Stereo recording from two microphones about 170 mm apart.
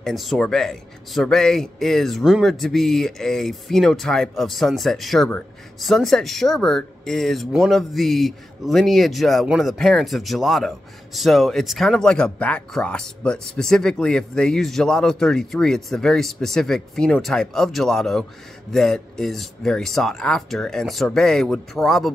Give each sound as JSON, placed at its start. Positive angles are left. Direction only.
{"t": 0.0, "sound": "a man's voice", "side_deg": 0}